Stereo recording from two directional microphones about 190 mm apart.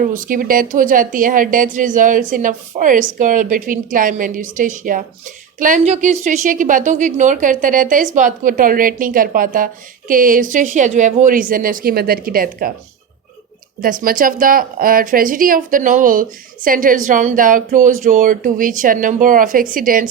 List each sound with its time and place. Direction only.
0.1 s a woman's voice: 45° right (ahead or behind)
13.8 s a woman's voice: 50° right (ahead or behind)